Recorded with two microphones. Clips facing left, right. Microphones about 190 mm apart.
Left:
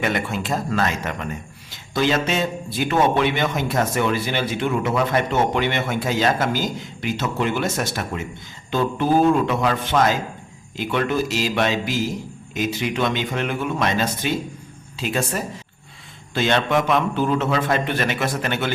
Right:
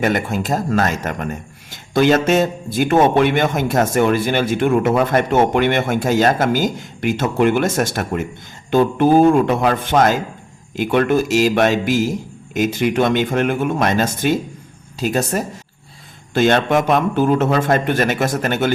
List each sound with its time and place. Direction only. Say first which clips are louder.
0.0 s a man's voice: right 5 dB; 40° right (ahead or behind)